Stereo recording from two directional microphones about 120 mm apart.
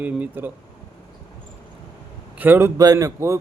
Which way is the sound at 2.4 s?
15° right (ahead or behind).